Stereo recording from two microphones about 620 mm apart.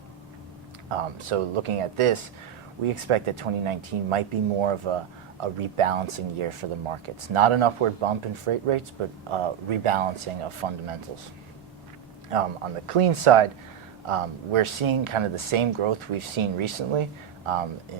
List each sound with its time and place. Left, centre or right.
0.9 s speech: right
12.3 s speech: right